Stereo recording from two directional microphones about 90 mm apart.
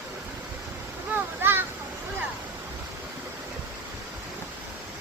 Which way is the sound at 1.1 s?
25° right (ahead or behind).